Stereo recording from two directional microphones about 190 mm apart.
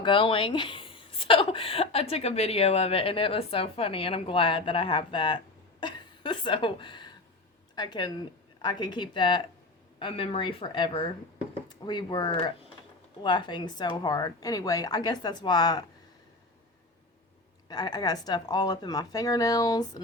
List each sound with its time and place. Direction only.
0.0 s a woman's voice: 25° left (ahead or behind)
17.7 s speech: 20° left (ahead or behind)